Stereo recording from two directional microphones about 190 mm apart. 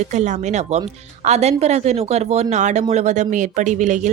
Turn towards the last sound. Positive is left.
turn(degrees=-40)  # may be behind; listen again after turning